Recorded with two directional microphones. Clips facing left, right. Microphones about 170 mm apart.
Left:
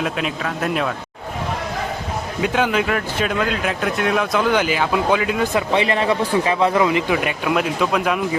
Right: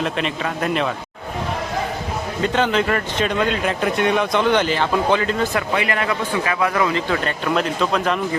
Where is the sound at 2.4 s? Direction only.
10° left (ahead or behind).